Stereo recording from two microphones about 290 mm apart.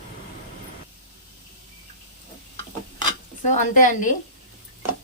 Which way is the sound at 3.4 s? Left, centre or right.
Left.